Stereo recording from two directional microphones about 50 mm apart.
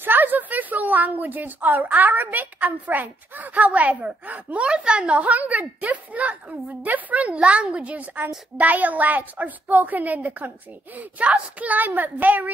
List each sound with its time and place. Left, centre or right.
0.0 s a woman's voice: right
5.2 s a woman's voice: right